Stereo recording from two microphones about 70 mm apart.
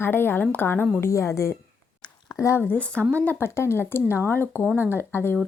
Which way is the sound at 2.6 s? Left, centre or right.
Left.